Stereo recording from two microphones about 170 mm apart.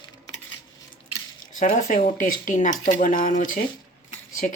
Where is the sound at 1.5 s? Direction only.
50° left (ahead or behind).